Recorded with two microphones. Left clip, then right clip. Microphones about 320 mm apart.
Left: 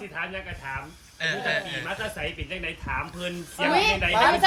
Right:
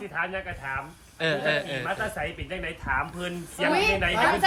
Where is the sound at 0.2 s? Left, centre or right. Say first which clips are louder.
Right 3 dB; centre.